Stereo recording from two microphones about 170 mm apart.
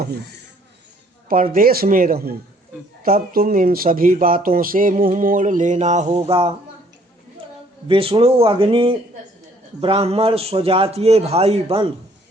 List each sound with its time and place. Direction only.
1.5 s speech: 60° right (ahead or behind); by 6.5 s 35° right (ahead or behind)
7.9 s a man's voice: 30° right (ahead or behind)